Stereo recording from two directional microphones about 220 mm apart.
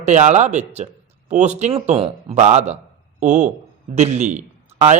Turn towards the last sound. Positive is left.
turn(degrees=-30)  # may be behind; listen again after turning